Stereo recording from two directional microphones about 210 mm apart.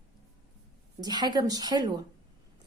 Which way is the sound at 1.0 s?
20° right (ahead or behind).